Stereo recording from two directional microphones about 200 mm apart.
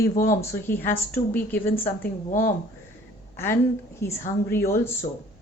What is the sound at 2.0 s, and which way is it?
Speech, 40° left (ahead or behind).